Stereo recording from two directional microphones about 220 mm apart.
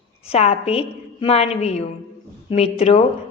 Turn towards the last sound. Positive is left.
turn(degrees=30)  # may be behind; listen again after turning